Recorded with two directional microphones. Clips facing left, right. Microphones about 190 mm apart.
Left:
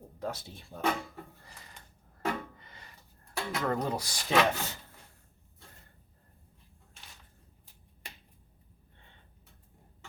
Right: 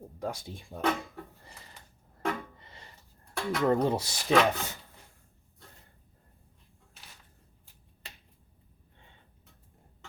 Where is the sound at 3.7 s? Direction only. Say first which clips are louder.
Right 7 dB; 25° right (ahead or behind).